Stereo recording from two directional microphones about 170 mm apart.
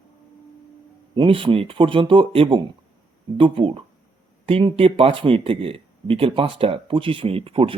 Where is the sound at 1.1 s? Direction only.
30° right (ahead or behind).